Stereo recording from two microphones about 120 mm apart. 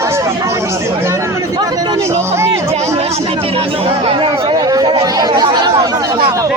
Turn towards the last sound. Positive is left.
turn(degrees=-30)  # may be behind; listen again after turning